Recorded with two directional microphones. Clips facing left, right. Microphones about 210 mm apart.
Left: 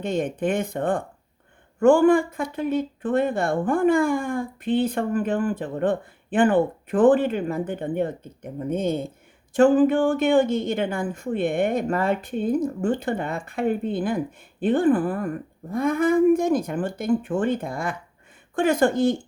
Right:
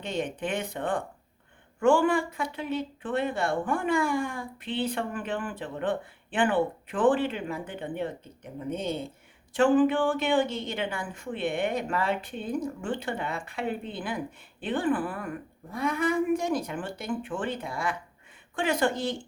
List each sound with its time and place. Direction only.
0.0 s speech: 45° left (ahead or behind)